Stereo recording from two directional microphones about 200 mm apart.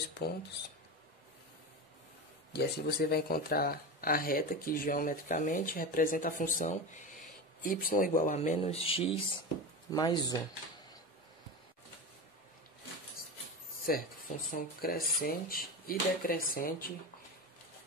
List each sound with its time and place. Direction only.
2.5 s speech: 50° left (ahead or behind); by 10.4 s 20° left (ahead or behind)
13.8 s speech: 45° left (ahead or behind)